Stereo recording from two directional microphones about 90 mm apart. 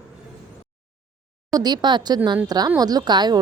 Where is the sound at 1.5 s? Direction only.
50° right (ahead or behind).